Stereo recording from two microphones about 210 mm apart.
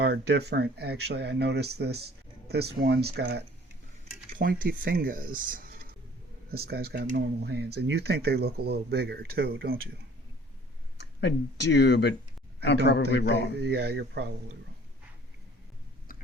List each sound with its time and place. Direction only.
0.0 s speech: 50° right (ahead or behind)
11.2 s a man's voice: 55° left (ahead or behind)
13.6 s speech: 50° right (ahead or behind)
16.1 s a sound: 40° left (ahead or behind)